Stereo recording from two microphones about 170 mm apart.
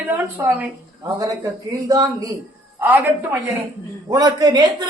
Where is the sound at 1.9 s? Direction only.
20° right (ahead or behind).